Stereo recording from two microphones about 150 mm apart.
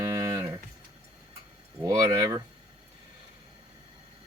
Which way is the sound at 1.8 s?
20° right (ahead or behind).